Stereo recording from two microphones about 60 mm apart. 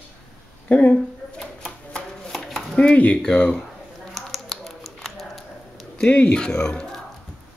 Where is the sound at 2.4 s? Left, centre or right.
Centre.